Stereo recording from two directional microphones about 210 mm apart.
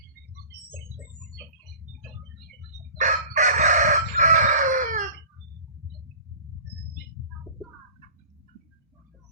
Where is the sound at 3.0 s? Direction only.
35° right (ahead or behind).